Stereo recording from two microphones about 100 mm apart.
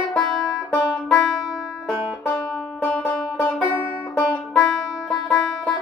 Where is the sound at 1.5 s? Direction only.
Centre (ahead or behind).